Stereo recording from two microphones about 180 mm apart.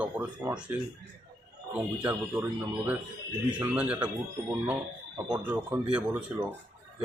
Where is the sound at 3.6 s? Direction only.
10° right (ahead or behind).